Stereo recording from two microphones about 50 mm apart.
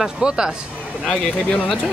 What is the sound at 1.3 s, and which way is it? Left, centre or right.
Speech, left.